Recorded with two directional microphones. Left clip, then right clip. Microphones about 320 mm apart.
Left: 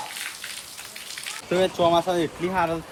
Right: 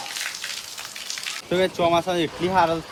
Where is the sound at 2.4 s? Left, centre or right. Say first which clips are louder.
Right 4 dB; centre.